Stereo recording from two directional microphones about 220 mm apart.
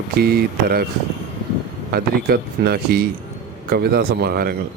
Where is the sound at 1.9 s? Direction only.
45° right (ahead or behind).